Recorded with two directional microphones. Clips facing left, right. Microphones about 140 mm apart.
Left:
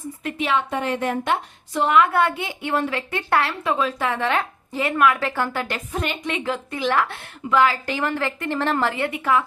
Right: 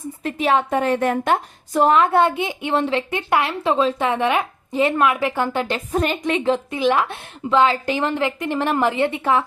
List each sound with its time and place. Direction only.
0.2 s a woman's voice: 35° right (ahead or behind); by 3.5 s 15° right (ahead or behind)
3.6 s a woman's voice: 25° right (ahead or behind)
5.9 s a woman's voice: 40° right (ahead or behind)
6.4 s a woman's voice: 20° right (ahead or behind)